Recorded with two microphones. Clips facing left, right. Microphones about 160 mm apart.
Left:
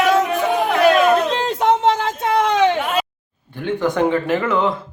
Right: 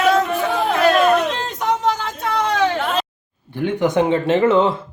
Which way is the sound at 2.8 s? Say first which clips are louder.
Left 1 dB; 10° left (ahead or behind).